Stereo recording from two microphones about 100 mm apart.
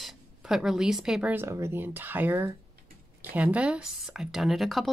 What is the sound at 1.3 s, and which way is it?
Speech, 25° right (ahead or behind).